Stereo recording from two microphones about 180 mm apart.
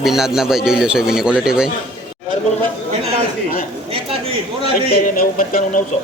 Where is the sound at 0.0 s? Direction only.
Centre (ahead or behind).